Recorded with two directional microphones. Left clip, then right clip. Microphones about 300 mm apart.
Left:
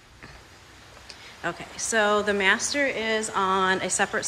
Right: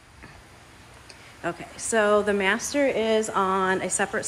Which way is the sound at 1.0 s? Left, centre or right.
Centre.